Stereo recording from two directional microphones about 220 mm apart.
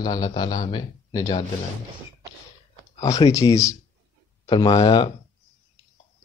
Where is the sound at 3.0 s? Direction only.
15° left (ahead or behind).